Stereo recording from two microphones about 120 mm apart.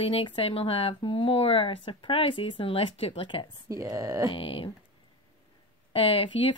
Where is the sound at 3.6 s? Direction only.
25° right (ahead or behind).